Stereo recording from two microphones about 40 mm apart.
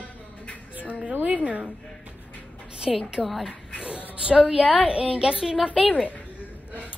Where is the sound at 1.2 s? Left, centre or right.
Right.